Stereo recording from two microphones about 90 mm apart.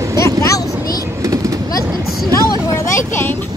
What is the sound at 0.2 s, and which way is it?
Vehicle, 30° left (ahead or behind).